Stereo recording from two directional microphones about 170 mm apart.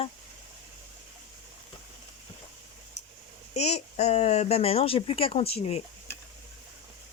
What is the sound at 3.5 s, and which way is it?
Speech, 40° left (ahead or behind).